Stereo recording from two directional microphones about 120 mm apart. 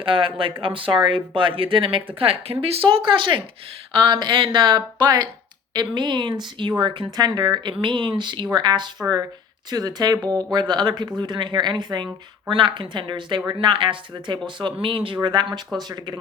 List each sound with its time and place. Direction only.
0.0 s speech: 45° right (ahead or behind)